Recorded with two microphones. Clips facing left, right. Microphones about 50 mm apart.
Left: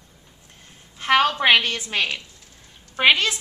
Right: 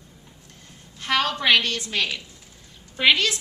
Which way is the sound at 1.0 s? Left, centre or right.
Left.